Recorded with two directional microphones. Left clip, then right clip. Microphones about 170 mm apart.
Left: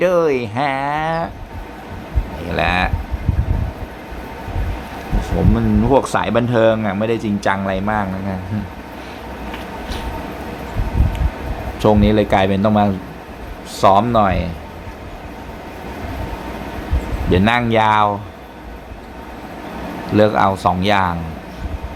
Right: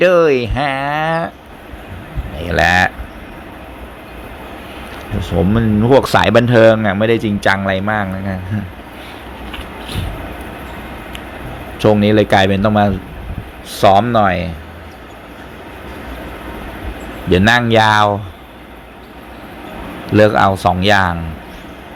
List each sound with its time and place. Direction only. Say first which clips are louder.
0.0 s speech: right 5 dB; 20° right (ahead or behind)
2.4 s speech: right 6 dB; 25° right (ahead or behind)
5.2 s speech: right 4 dB; 25° right (ahead or behind)
11.8 s speech: right 3 dB; 15° right (ahead or behind)
17.2 s speech: right 4 dB; 20° right (ahead or behind)
20.1 s speech: right 3 dB; 20° right (ahead or behind)